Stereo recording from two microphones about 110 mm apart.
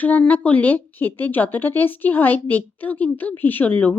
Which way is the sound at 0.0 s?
15° left (ahead or behind).